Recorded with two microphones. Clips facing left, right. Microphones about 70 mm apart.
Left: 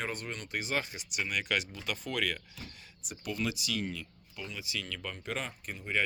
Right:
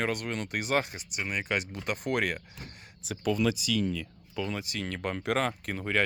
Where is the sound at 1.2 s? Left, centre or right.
Right.